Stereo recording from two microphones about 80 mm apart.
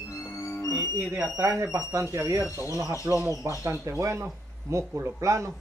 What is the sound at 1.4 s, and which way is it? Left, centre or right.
Speech, right.